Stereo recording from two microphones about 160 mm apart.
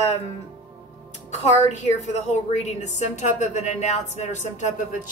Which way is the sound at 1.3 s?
45° left (ahead or behind).